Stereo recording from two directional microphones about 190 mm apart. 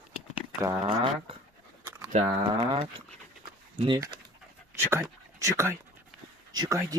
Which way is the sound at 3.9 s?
20° right (ahead or behind).